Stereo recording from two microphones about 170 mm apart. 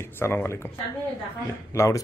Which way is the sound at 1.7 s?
15° left (ahead or behind).